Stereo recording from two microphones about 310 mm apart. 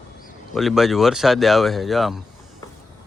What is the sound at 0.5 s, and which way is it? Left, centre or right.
Speech, centre.